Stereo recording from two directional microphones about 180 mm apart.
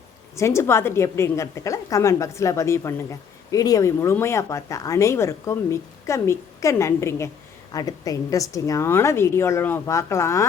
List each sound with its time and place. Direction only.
0.3 s a woman's voice: 15° left (ahead or behind)